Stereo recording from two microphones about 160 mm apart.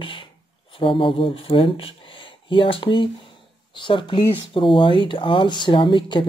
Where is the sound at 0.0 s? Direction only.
30° left (ahead or behind).